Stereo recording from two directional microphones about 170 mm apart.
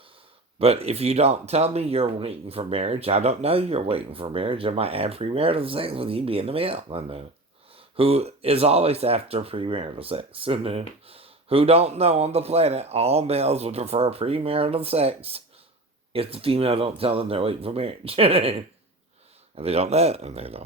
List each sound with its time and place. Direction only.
0.6 s speech: 35° right (ahead or behind)
19.5 s speech: 35° right (ahead or behind)